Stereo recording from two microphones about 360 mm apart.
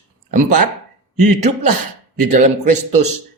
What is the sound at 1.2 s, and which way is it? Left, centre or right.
Speech, right.